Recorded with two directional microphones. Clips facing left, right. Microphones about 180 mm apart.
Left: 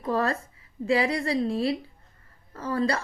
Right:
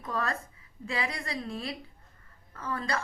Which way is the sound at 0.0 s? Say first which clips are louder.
Left 7 dB; 35° left (ahead or behind).